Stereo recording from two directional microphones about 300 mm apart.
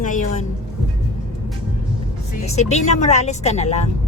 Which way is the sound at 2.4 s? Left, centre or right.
Left.